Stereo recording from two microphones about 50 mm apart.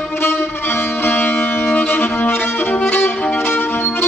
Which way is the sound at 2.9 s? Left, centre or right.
Left.